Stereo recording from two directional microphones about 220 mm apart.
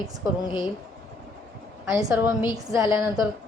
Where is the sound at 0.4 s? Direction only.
20° left (ahead or behind).